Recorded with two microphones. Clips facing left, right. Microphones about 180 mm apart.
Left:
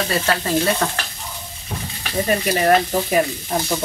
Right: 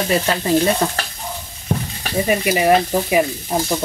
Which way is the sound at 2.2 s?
10° right (ahead or behind).